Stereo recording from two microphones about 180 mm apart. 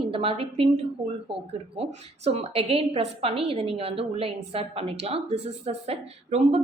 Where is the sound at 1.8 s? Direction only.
35° right (ahead or behind).